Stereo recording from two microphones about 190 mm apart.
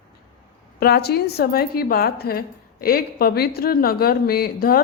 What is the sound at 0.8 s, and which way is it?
A woman's voice, 55° left (ahead or behind).